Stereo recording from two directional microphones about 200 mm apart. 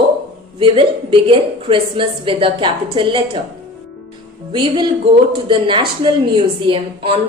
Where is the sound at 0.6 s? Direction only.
25° right (ahead or behind).